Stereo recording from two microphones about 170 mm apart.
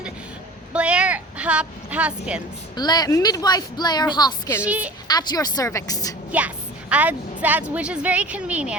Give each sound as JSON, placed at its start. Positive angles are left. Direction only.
{"t": 0.7, "sound": "a sound", "side_deg": -5}
{"t": 2.7, "sound": "a woman's voice", "side_deg": 25}
{"t": 4.6, "sound": "a woman's voice", "side_deg": -10}
{"t": 5.0, "sound": "a woman's voice", "side_deg": 25}
{"t": 6.9, "sound": "a woman's voice", "side_deg": -10}